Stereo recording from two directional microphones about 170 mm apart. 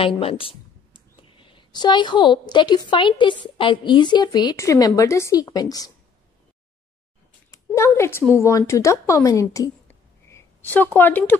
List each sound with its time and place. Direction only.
0.0 s speech: 35° left (ahead or behind)
7.5 s a woman's voice: 15° left (ahead or behind)